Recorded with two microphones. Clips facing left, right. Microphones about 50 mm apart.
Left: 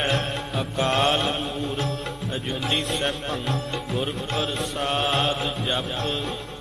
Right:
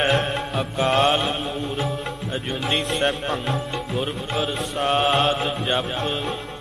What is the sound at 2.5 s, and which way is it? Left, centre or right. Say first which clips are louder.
Speech: right 2 dB; centre.